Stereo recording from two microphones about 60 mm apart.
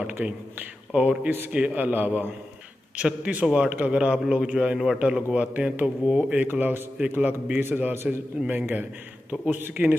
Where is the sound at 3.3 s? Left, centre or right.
Centre.